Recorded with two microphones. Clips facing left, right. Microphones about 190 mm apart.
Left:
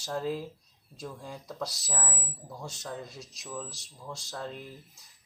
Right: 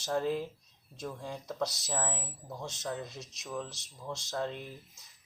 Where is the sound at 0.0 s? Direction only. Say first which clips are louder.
Right 1 dB; centre (ahead or behind).